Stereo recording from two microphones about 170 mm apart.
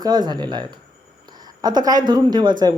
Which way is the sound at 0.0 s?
25° right (ahead or behind).